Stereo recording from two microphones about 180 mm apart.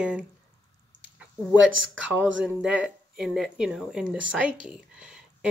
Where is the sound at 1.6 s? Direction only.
90° right.